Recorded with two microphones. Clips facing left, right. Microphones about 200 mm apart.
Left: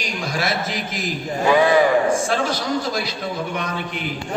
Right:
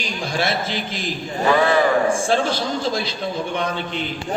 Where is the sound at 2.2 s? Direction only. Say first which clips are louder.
Right 2 dB; 30° right (ahead or behind).